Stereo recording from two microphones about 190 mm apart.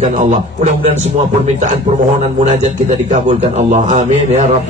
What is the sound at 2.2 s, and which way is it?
A man's voice, 35° right (ahead or behind).